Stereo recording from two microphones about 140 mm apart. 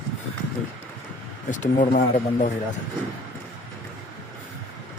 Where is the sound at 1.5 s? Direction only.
60° left (ahead or behind).